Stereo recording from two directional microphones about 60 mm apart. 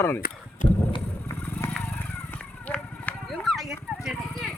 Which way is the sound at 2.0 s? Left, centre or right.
Left.